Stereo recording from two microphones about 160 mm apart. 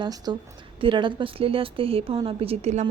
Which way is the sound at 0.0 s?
25° right (ahead or behind).